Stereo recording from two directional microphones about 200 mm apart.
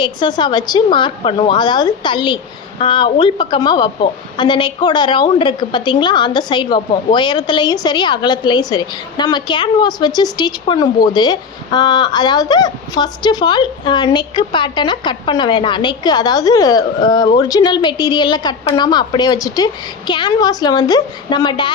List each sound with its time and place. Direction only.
0.0 s a woman's voice: 20° left (ahead or behind)